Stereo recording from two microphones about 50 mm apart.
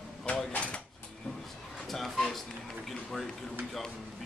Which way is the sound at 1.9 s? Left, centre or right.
Centre.